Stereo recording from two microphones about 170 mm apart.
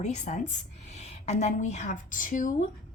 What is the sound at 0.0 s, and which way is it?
A woman's voice, 40° left (ahead or behind).